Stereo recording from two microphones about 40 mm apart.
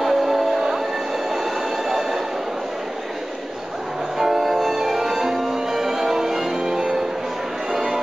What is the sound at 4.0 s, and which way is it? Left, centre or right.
Music, centre.